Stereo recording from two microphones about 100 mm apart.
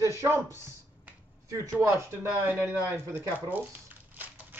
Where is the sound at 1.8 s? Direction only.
25° right (ahead or behind).